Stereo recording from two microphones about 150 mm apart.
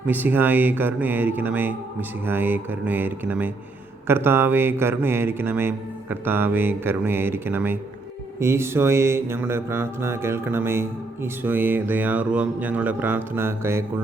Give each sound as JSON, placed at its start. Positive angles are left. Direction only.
{"t": 0.1, "sound": "mantra", "side_deg": -10}